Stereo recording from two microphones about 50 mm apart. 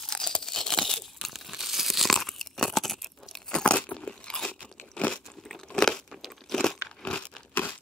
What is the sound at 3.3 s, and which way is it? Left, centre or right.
Crunch, centre.